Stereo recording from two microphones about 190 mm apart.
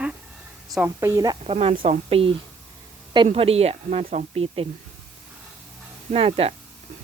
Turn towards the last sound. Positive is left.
turn(degrees=-30)  # may be behind; listen again after turning